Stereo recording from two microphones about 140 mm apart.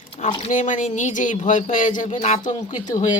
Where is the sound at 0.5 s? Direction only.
60° left (ahead or behind).